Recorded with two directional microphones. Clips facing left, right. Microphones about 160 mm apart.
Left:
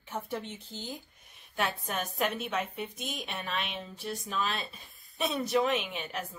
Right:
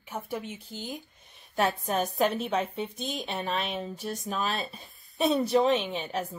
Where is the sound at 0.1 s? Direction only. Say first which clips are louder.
Right 1 dB; 10° right (ahead or behind).